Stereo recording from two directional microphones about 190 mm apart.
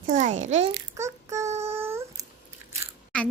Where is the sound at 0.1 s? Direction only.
40° right (ahead or behind).